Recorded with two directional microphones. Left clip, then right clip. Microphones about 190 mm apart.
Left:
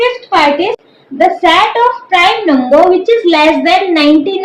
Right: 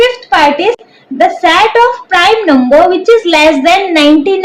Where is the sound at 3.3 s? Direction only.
40° right (ahead or behind).